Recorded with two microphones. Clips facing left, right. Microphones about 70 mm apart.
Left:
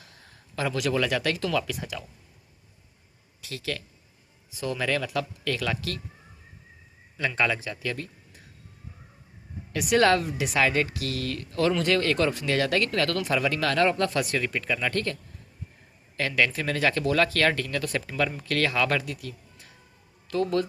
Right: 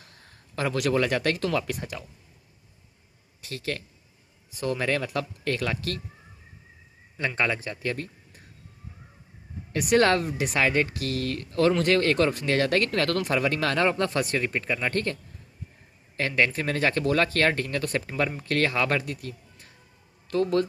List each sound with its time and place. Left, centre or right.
0.5 s speech: right
3.4 s speech: right
7.2 s speech: right
9.7 s speech: right
13.7 s speech: centre; by 20.7 s right